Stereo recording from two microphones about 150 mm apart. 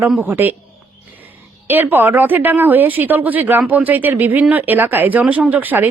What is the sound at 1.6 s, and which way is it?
A woman's voice, 15° right (ahead or behind).